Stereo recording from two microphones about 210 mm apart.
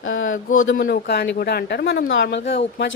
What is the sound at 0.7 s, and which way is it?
A woman's voice, 45° left (ahead or behind).